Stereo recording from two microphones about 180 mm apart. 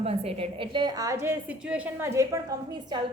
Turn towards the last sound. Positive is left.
turn(degrees=-25)  # may be behind; listen again after turning